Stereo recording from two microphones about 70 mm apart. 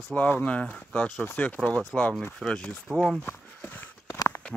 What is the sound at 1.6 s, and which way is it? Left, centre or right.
Speech, centre.